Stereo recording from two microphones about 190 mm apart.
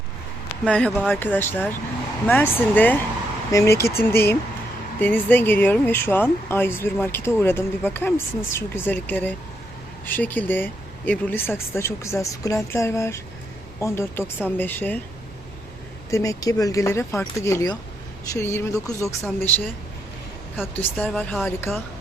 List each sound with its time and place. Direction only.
0.6 s speech: 5° left (ahead or behind)
16.0 s speech: 15° left (ahead or behind)
20.7 s speech: 5° left (ahead or behind)